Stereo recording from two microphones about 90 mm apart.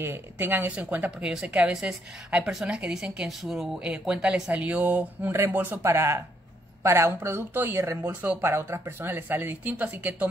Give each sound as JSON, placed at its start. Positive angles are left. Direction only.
{"t": 0.0, "sound": "a woman's voice", "side_deg": -25}
{"t": 8.4, "sound": "speech", "side_deg": -25}